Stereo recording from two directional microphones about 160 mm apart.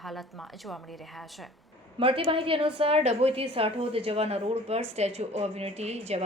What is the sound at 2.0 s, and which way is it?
A woman's voice, 35° right (ahead or behind).